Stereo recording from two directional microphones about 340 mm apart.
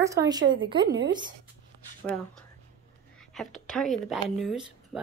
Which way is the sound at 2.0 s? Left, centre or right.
Centre.